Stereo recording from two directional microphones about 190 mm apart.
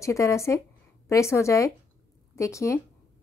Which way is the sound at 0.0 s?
15° left (ahead or behind).